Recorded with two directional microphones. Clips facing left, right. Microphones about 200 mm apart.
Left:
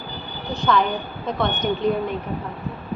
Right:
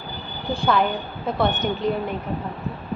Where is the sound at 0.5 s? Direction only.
10° right (ahead or behind).